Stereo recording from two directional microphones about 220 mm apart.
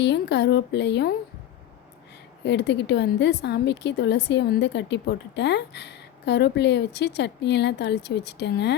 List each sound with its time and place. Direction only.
0.0 s a woman's voice: 50° left (ahead or behind)
2.4 s a woman's voice: 50° left (ahead or behind)